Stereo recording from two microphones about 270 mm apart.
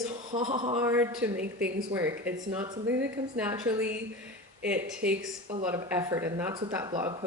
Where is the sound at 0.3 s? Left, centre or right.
Centre.